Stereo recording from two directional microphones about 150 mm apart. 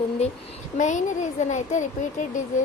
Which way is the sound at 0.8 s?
55° left (ahead or behind).